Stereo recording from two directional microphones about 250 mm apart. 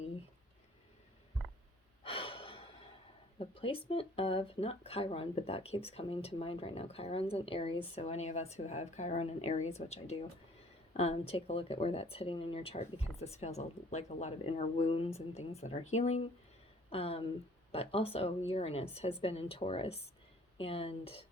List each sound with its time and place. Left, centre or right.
2.0 s gasp: left
3.3 s speech: left